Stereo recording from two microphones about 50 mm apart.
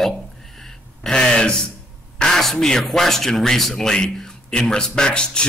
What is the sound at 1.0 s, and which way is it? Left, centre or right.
A man's voice, centre.